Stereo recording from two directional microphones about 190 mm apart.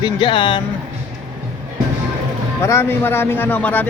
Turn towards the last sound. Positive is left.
turn(degrees=10)  # may be behind; listen again after turning